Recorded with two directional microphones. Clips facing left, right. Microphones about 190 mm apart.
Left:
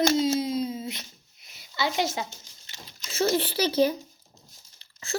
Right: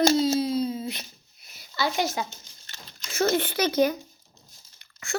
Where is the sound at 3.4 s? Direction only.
30° left (ahead or behind).